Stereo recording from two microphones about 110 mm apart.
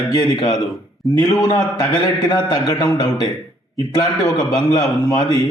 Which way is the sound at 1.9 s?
40° left (ahead or behind).